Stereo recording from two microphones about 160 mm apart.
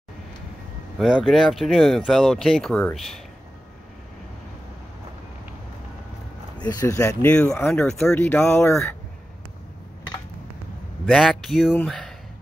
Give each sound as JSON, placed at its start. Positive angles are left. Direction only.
{"t": 0.9, "sound": "speech", "side_deg": 0}
{"t": 6.6, "sound": "speech", "side_deg": 25}
{"t": 11.1, "sound": "speech", "side_deg": 5}